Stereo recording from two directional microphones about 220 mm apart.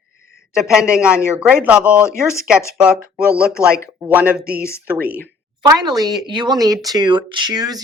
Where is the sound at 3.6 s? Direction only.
10° left (ahead or behind).